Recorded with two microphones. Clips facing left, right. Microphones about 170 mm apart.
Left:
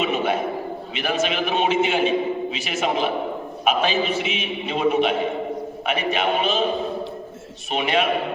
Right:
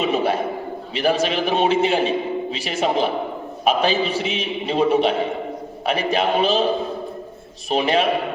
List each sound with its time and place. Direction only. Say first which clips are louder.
0.0 s a sound: right 2 dB; 35° right (ahead or behind)
0.9 s a man's voice: right 4 dB; 35° right (ahead or behind)
7.7 s a man's voice: right 3 dB; 35° right (ahead or behind)